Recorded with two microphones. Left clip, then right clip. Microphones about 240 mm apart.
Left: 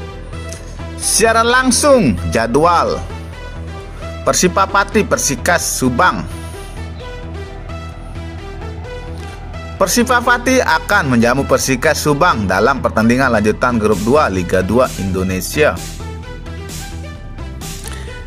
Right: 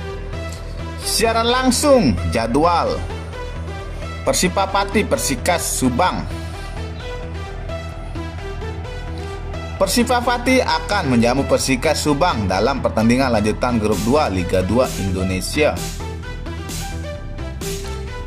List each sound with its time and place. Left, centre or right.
1.1 s speech: left
4.3 s speech: centre
9.8 s speech: left